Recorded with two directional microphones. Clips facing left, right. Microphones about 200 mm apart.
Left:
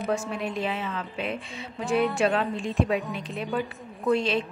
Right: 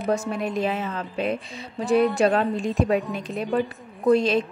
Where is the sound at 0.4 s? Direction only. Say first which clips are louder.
Right 4 dB; 45° right (ahead or behind).